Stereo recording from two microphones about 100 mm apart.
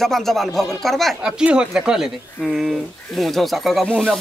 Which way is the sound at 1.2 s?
10° right (ahead or behind).